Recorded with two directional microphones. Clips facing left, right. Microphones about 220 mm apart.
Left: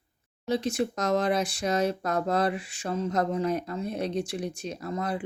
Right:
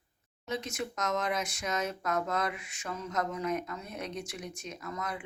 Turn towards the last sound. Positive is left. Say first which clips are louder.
# left 7 dB
turn(degrees=30)  # may be behind; listen again after turning